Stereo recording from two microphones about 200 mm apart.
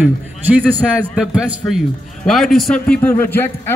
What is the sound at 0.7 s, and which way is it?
A man's voice, 10° right (ahead or behind).